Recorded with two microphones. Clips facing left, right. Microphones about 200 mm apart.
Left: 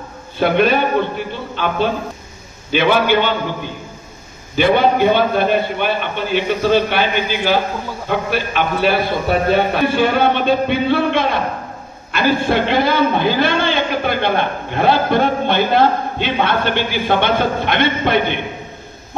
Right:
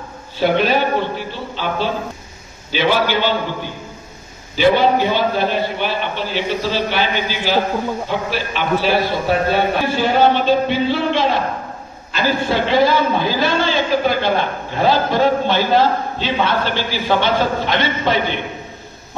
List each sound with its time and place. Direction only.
0.4 s a man's voice: 55° left (ahead or behind)
4.6 s a man's voice: 55° left (ahead or behind)